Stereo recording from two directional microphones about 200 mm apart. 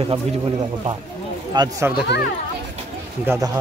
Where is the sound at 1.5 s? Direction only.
20° right (ahead or behind).